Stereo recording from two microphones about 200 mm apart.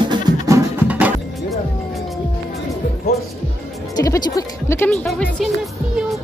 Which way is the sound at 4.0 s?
20° left (ahead or behind).